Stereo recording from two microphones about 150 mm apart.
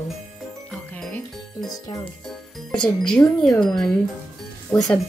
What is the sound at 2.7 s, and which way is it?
Speech, 5° left (ahead or behind).